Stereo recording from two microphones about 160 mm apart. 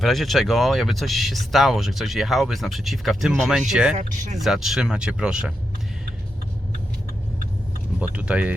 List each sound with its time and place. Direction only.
0.0 s speech: centre (ahead or behind)
3.9 s speech: 50° right (ahead or behind)
4.4 s speech: centre (ahead or behind)
7.9 s speech: 5° right (ahead or behind)